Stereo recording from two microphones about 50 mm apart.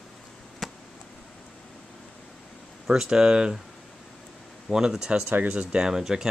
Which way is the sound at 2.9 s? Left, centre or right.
Centre.